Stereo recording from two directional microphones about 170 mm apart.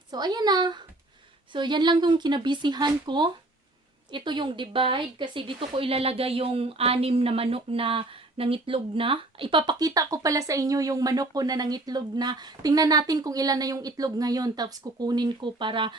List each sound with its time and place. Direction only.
0.1 s speech: 25° right (ahead or behind)